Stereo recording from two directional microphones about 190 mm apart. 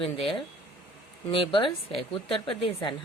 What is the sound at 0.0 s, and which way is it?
Speech, 30° left (ahead or behind).